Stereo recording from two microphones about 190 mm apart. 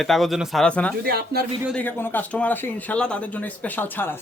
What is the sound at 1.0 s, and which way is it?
Speech, 55° right (ahead or behind).